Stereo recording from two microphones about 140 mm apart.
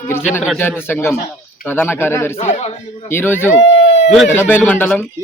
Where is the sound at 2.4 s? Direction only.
55° left (ahead or behind).